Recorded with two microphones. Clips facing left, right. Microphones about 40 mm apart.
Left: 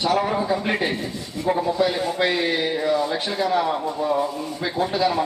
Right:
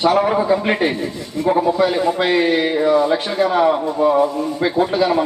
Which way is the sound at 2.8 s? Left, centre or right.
Right.